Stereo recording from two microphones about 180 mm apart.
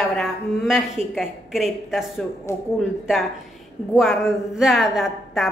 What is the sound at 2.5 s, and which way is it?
Speech, 15° left (ahead or behind).